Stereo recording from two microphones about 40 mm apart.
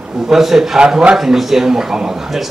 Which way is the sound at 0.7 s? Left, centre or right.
Centre.